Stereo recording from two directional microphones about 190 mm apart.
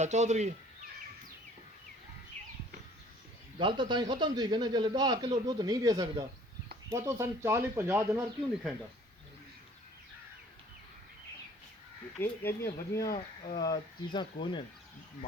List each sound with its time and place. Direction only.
0.0 s speech: 40° right (ahead or behind)
3.6 s speech: 25° right (ahead or behind)
12.1 s speech: 10° left (ahead or behind)